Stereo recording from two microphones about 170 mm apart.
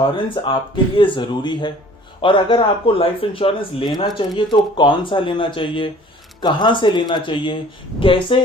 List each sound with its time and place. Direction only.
0.4 s speech: 25° left (ahead or behind)